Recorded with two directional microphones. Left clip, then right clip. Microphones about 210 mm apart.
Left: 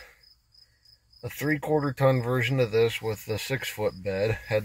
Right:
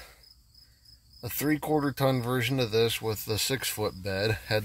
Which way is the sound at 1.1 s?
20° right (ahead or behind).